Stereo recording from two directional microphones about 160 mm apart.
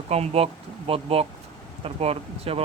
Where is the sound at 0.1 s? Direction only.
40° right (ahead or behind).